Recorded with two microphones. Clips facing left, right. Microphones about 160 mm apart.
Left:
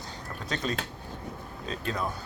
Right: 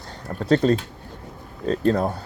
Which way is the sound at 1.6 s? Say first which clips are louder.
Right 13 dB; 60° right (ahead or behind).